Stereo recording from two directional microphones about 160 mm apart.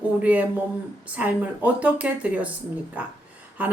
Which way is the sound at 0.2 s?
10° right (ahead or behind).